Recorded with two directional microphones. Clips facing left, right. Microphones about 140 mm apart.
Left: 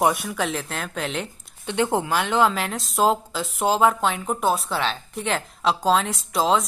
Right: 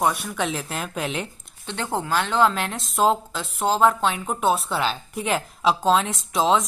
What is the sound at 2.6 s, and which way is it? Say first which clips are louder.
Speech: even; centre (ahead or behind).